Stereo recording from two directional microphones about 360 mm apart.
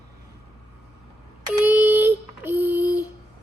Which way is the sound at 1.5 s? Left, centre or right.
Centre.